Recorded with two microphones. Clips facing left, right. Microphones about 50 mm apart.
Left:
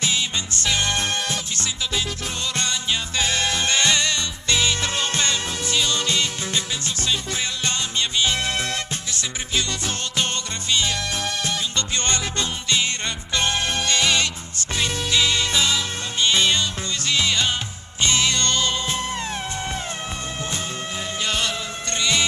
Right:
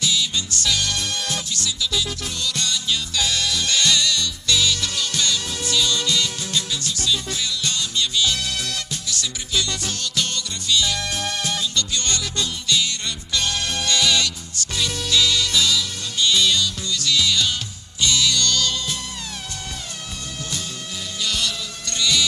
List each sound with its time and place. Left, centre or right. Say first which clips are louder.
0.0 s music: right 1 dB; left
21.2 s music: even; left